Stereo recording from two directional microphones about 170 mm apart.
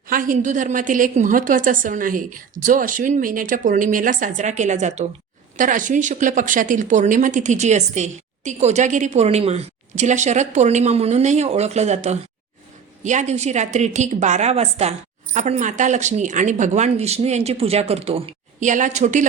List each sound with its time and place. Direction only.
0.1 s speech: 55° right (ahead or behind)